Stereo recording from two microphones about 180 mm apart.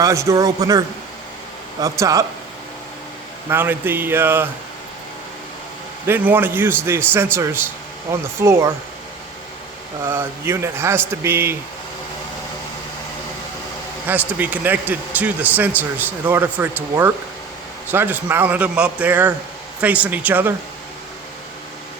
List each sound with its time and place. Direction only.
0.0 s speech: 15° right (ahead or behind)
3.5 s speech: 10° right (ahead or behind)
6.1 s speech: 10° right (ahead or behind)
10.1 s speech: 15° right (ahead or behind)
14.1 s speech: 10° right (ahead or behind)